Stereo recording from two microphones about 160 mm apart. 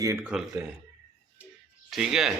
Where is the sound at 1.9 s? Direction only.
5° right (ahead or behind).